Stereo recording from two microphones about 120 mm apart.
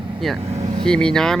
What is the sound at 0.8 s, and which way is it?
Speech, 5° left (ahead or behind).